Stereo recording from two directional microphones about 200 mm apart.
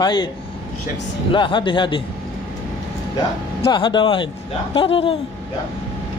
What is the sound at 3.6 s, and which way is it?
Speech, 25° left (ahead or behind).